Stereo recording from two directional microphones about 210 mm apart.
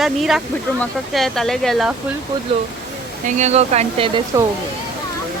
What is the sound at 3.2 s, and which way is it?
Speech, 35° right (ahead or behind).